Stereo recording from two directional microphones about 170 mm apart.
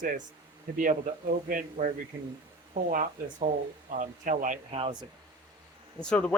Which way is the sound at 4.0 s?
50° right (ahead or behind).